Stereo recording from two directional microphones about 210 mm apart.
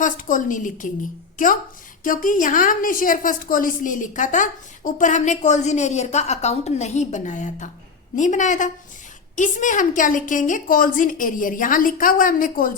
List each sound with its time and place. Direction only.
0.0 s a woman's voice: 40° left (ahead or behind)
2.0 s a woman's voice: 40° left (ahead or behind)